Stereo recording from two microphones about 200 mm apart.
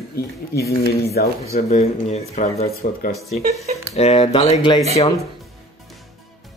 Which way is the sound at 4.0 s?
30° left (ahead or behind).